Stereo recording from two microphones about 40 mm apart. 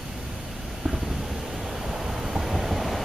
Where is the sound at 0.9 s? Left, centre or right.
Centre.